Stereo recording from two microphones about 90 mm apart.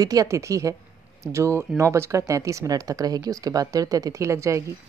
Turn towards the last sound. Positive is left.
turn(degrees=-35)  # may be behind; listen again after turning